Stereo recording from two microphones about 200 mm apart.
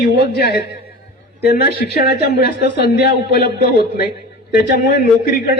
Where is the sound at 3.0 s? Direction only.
55° left (ahead or behind).